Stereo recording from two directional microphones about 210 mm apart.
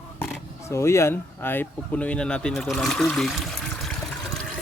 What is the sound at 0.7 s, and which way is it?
Speech, 15° left (ahead or behind).